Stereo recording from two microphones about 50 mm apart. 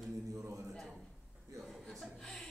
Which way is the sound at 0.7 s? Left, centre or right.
Centre.